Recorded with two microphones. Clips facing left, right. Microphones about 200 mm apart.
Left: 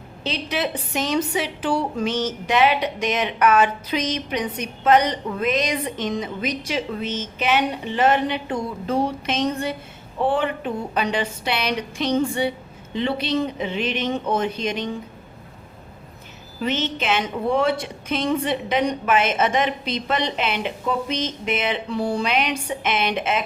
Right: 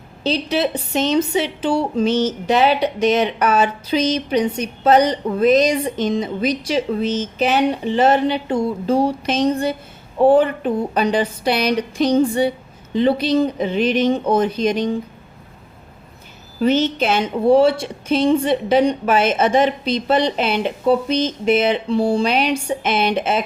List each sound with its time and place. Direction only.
0.2 s a woman's voice: 30° right (ahead or behind)
16.6 s a woman's voice: 40° right (ahead or behind)